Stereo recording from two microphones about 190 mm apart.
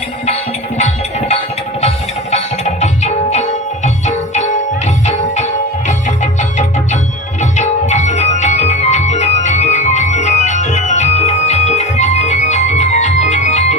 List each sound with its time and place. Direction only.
2.3 s music: 35° left (ahead or behind)
5.0 s music: 35° left (ahead or behind)
7.5 s music: 35° left (ahead or behind)